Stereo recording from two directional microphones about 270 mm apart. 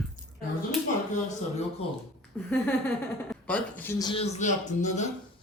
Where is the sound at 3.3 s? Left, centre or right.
Centre.